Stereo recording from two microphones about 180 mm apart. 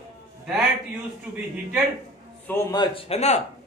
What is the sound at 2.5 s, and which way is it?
Speech, 20° left (ahead or behind).